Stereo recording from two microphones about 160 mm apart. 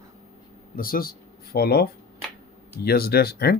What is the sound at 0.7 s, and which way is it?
Speech, 60° left (ahead or behind).